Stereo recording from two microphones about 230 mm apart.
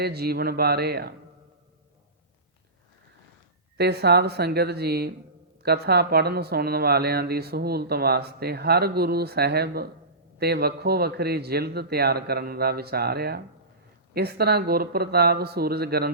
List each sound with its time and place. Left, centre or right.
0.0 s speech: right
3.8 s speech: right